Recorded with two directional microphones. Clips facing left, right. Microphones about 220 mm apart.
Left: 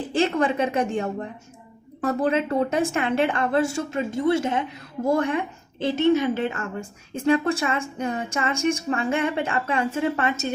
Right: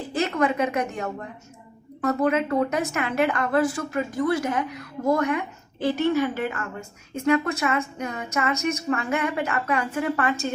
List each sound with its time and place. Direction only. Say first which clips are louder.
0.1 s a woman's voice: left 1 dB; 30° left (ahead or behind)